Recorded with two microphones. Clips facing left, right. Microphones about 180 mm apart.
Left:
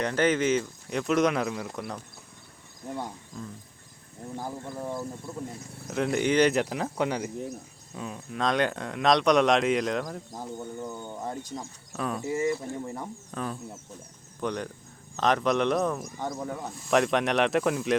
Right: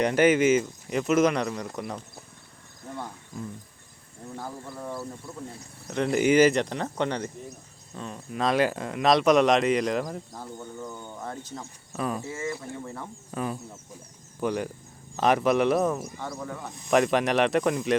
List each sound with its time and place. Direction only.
0.0 s speech: 15° right (ahead or behind)
4.4 s speech: 20° left (ahead or behind)
5.9 s speech: centre (ahead or behind)
10.3 s speech: 20° left (ahead or behind)
11.9 s speech: centre (ahead or behind)
12.3 s speech: 20° left (ahead or behind)
13.3 s speech: 10° right (ahead or behind)
16.1 s speech: 20° left (ahead or behind)
16.9 s speech: centre (ahead or behind)